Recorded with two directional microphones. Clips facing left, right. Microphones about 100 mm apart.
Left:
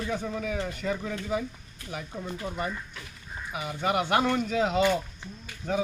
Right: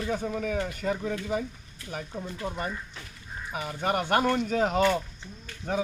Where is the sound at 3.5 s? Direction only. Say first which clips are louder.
Left 1 dB; 45° right (ahead or behind).